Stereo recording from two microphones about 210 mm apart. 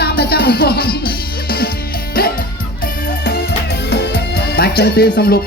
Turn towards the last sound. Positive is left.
turn(degrees=50)  # may be behind; listen again after turning